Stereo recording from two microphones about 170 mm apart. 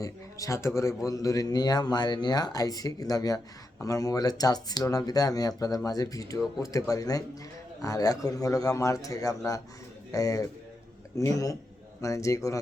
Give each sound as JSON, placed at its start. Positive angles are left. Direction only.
{"t": 0.0, "sound": "a man's voice", "side_deg": 20}